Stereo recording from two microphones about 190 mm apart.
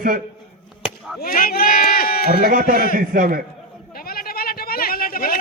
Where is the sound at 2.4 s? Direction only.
50° right (ahead or behind).